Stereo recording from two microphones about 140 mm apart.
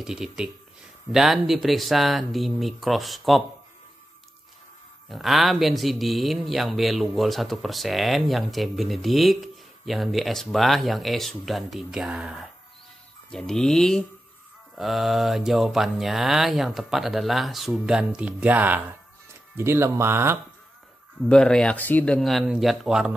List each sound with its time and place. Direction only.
0.0 s a man's voice: 5° right (ahead or behind)
5.1 s a man's voice: centre (ahead or behind); by 20.3 s 15° right (ahead or behind)
21.3 s a man's voice: 5° left (ahead or behind)